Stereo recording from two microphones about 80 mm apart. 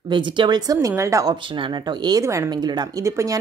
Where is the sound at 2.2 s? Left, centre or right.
Right.